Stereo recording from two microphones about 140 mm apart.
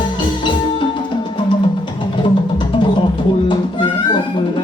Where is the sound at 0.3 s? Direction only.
35° left (ahead or behind).